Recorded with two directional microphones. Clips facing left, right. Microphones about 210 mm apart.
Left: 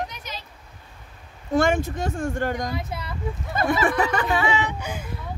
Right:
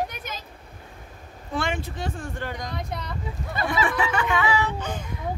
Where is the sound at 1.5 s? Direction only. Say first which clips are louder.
Left 8 dB; 45° left (ahead or behind).